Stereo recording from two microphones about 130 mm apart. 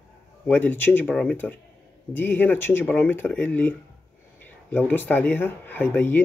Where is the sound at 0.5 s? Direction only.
15° left (ahead or behind).